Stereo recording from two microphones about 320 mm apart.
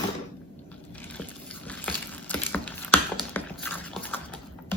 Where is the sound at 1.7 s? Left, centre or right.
Centre.